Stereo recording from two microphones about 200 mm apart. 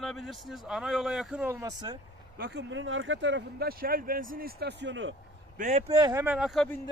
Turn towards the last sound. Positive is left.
turn(degrees=0)  # may be behind; listen again after turning